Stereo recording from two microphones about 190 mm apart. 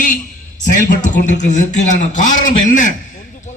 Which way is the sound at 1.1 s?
40° left (ahead or behind).